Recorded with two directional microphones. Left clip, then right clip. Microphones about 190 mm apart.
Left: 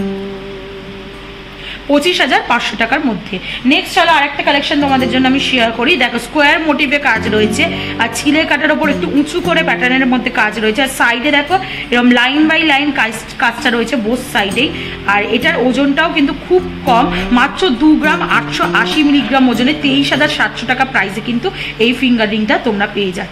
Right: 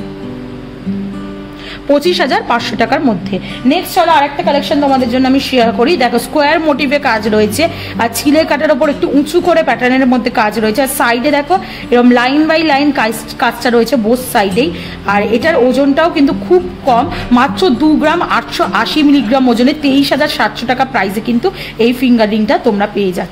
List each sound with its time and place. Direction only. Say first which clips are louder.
2.0 s a woman's voice: left 2 dB; 80° right
17.3 s a woman's voice: right 2 dB; 70° right (ahead or behind)